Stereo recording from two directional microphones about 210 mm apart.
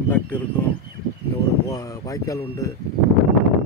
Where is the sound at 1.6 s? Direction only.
15° left (ahead or behind).